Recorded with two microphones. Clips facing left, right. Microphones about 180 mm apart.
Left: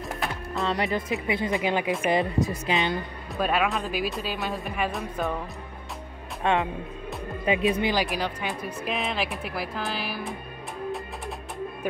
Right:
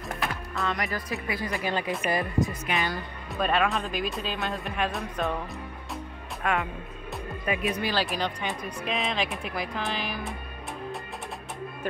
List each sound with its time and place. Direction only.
0.6 s speech: 30° left (ahead or behind)
0.8 s speech: 20° left (ahead or behind)
3.3 s speech: 5° left (ahead or behind)
6.4 s speech: 25° left (ahead or behind)
8.1 s speech: 5° left (ahead or behind)